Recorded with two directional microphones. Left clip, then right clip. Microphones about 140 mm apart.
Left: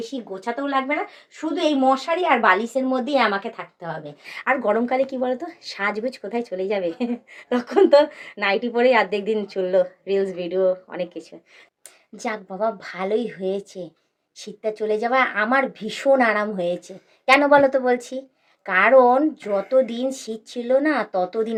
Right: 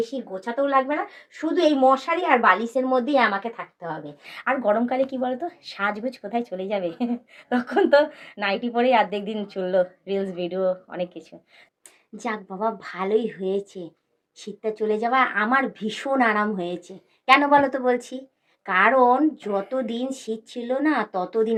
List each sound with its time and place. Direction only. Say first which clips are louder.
0.1 s a woman's voice: left 2 dB; 30° left (ahead or behind)